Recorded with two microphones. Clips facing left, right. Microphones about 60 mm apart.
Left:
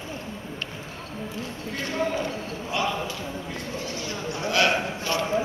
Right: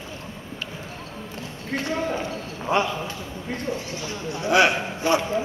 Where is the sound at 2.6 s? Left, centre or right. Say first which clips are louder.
Right 6 dB; right.